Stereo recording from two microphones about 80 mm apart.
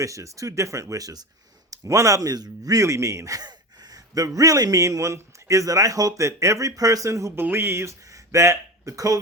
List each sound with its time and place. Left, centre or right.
0.0 s a man's voice: right
3.4 s a man's voice: right
7.3 s speech: right